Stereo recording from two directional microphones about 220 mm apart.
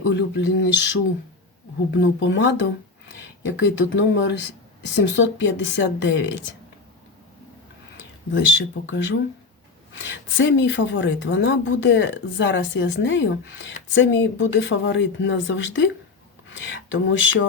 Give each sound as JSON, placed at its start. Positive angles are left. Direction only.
{"t": 0.1, "sound": "speech", "side_deg": 50}
{"t": 1.9, "sound": "a woman's voice", "side_deg": 55}
{"t": 8.3, "sound": "a woman's voice", "side_deg": 60}